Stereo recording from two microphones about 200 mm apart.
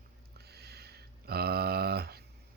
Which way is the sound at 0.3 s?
50° right (ahead or behind).